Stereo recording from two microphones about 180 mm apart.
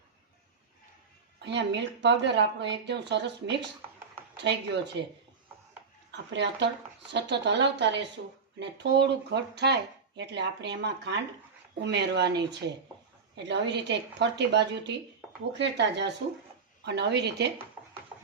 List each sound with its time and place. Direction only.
1.4 s speech: 70° right (ahead or behind)
6.1 s speech: 75° right (ahead or behind)